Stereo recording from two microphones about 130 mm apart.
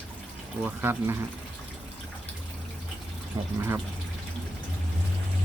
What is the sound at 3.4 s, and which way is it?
Speech, 30° right (ahead or behind).